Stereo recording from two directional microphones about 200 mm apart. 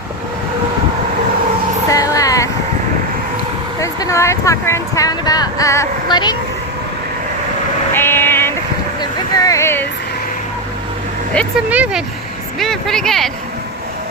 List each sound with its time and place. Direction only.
1.9 s vehicle: 15° left (ahead or behind)
3.8 s speech: 15° left (ahead or behind)
7.9 s female singing: 10° left (ahead or behind)
9.0 s a sound: 20° left (ahead or behind)
11.7 s speech: 5° right (ahead or behind)